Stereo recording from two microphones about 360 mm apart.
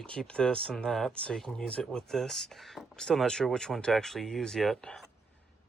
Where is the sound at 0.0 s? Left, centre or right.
Centre.